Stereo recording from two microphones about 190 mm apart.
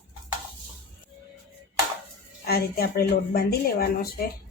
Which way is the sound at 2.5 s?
55° left (ahead or behind).